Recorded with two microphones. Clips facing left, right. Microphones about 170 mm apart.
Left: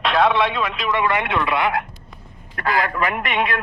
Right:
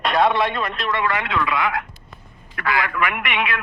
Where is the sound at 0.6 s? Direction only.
10° left (ahead or behind).